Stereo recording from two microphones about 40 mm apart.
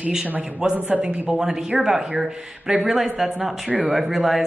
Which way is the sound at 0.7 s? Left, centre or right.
Right.